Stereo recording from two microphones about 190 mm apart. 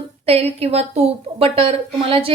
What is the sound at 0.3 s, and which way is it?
A woman's voice, 30° right (ahead or behind).